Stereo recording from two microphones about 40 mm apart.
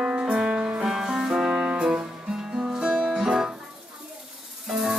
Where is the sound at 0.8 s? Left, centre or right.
Centre.